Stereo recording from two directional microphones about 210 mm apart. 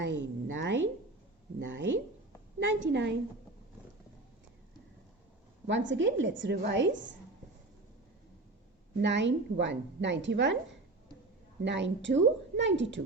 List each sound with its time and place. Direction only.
0.0 s a sound: 60° right (ahead or behind)
1.5 s a woman's voice: 60° right (ahead or behind)
5.6 s a woman's voice: 60° right (ahead or behind)
9.0 s a woman's voice: 55° right (ahead or behind)
11.6 s a woman's voice: 55° right (ahead or behind)